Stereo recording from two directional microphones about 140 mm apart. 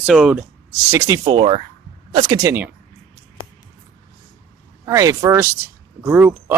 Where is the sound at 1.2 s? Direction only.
40° right (ahead or behind).